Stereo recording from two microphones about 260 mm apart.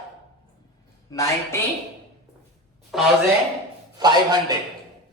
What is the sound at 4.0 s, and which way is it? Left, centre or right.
Speech, centre.